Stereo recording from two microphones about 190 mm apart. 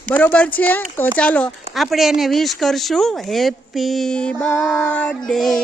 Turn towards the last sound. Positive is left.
turn(degrees=0)  # may be behind; listen again after turning